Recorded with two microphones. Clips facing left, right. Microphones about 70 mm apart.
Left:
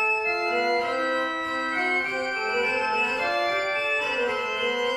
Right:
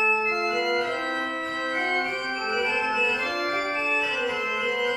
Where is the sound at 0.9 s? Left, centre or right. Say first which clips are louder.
Left 3 dB; left.